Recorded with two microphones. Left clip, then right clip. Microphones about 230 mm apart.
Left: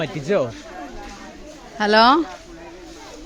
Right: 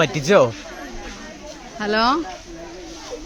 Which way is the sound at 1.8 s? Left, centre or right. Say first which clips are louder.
Left 5 dB; left.